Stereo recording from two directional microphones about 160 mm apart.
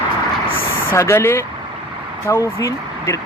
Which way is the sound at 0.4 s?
65° left (ahead or behind).